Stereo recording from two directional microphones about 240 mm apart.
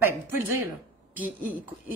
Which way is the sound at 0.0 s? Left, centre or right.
Centre.